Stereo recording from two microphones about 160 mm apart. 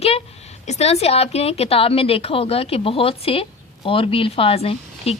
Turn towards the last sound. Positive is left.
turn(degrees=35)  # may be behind; listen again after turning